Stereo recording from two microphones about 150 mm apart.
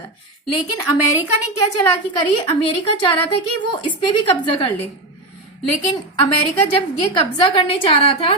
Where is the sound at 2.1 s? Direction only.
35° left (ahead or behind).